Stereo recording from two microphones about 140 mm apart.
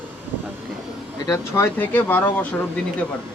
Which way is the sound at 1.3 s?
20° left (ahead or behind).